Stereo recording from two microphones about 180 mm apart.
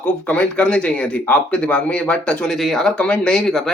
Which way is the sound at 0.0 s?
10° left (ahead or behind).